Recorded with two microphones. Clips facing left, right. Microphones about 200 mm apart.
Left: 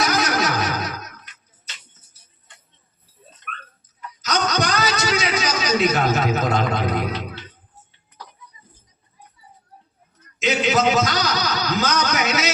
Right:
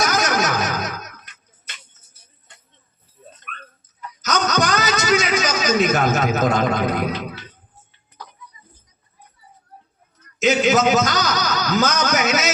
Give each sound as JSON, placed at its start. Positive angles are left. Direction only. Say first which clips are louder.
{"t": 0.0, "sound": "music", "louder": "right 1 dB", "side_deg": -45}
{"t": 4.2, "sound": "a sound", "louder": "right 2 dB", "side_deg": -45}
{"t": 6.1, "sound": "a man's voice", "louder": "right 2 dB", "side_deg": -45}
{"t": 10.4, "sound": "a man's voice", "louder": "right 3 dB", "side_deg": -45}